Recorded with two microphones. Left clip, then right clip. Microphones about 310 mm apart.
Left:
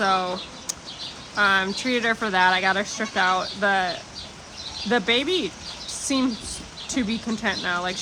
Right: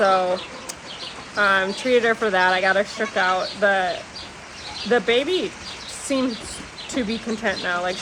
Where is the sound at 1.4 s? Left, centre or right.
Centre.